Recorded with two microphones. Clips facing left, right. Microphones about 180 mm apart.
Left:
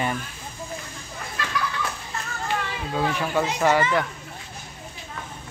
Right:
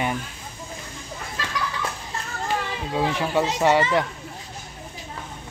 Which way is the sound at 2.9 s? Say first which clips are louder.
Right 1 dB; 20° right (ahead or behind).